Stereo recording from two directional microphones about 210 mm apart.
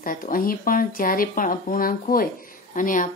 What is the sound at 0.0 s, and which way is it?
A woman's voice, 40° left (ahead or behind).